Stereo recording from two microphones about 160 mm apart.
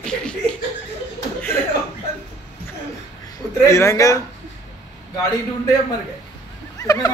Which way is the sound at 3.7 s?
20° left (ahead or behind).